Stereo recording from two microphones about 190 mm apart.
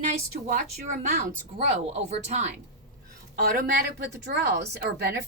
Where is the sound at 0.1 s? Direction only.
40° right (ahead or behind).